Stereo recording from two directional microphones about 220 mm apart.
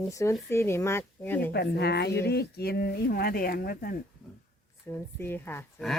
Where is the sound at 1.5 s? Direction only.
45° left (ahead or behind).